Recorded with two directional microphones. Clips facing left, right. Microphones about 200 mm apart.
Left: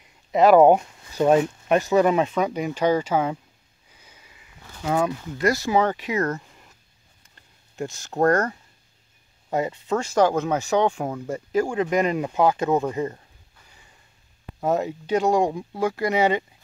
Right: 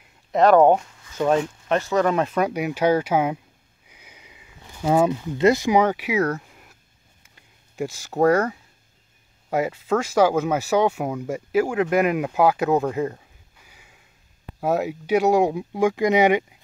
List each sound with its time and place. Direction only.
0.3 s speech: 5° left (ahead or behind)
2.2 s speech: 5° right (ahead or behind)
3.9 s sniff: 15° right (ahead or behind)
4.8 s speech: 25° right (ahead or behind); by 8.5 s 5° right (ahead or behind)
9.7 s speech: 5° right (ahead or behind)